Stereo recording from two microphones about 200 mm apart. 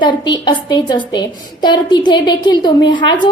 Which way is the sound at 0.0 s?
20° left (ahead or behind).